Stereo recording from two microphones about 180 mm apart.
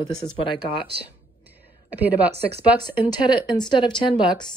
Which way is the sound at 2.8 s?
25° left (ahead or behind).